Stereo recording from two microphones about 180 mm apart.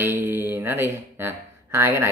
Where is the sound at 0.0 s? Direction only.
15° right (ahead or behind).